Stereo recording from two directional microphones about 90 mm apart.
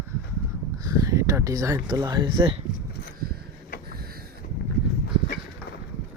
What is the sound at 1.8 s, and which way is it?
Speech, 55° right (ahead or behind).